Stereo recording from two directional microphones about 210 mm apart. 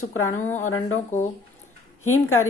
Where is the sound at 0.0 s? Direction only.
85° left.